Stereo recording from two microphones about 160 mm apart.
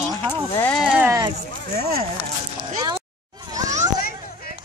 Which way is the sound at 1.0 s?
20° right (ahead or behind).